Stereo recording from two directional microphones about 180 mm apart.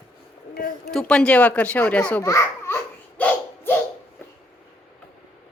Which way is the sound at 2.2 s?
15° left (ahead or behind).